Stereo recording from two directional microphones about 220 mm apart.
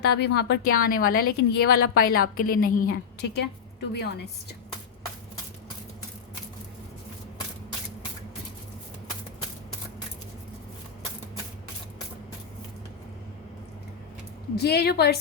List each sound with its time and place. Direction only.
0.0 s a woman's voice: 50° left (ahead or behind)
14.5 s a woman's voice: 45° left (ahead or behind)